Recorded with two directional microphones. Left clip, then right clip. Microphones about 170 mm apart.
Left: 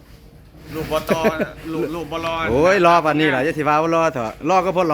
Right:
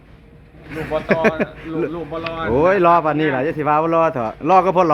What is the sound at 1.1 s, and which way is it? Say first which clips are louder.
Speech: right 4 dB; centre (ahead or behind).